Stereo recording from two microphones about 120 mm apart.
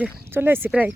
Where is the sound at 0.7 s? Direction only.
5° right (ahead or behind).